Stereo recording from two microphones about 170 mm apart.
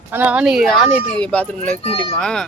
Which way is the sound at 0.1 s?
10° right (ahead or behind).